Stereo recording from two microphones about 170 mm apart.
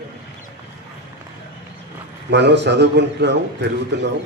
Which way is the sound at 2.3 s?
90° right.